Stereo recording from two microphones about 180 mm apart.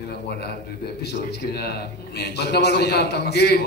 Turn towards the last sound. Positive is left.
turn(degrees=65)  # may be behind; listen again after turning